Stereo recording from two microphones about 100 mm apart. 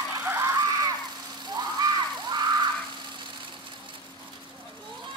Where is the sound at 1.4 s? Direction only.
45° right (ahead or behind).